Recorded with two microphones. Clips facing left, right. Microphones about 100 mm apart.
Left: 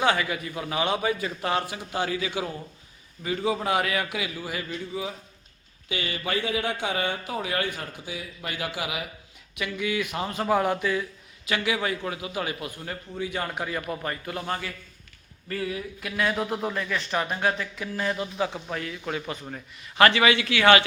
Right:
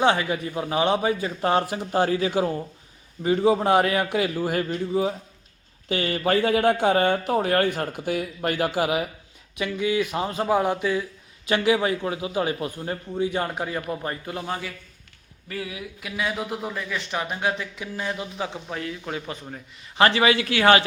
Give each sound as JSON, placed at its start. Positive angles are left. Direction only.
{"t": 0.0, "sound": "a man's voice", "side_deg": -30}
{"t": 9.6, "sound": "a man's voice", "side_deg": -30}
{"t": 11.4, "sound": "a man's voice", "side_deg": -30}
{"t": 14.4, "sound": "a man's voice", "side_deg": -10}